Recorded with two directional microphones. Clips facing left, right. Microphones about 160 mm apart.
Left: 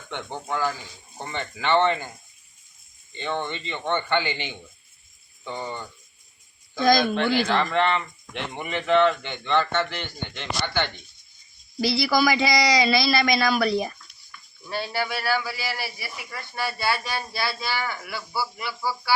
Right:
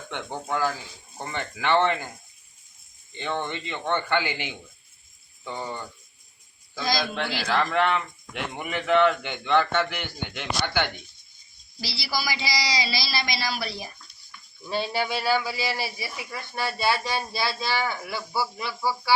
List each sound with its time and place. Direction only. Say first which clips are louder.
0.1 s speech: even; 10° right (ahead or behind)
3.7 s speech: left 1 dB; 10° right (ahead or behind)
6.8 s speech: left 8 dB; 55° left (ahead or behind)
7.3 s speech: right 2 dB; 5° right (ahead or behind)
11.8 s speech: left 10 dB; 55° left (ahead or behind)
14.7 s a man's voice: right 1 dB; 20° right (ahead or behind)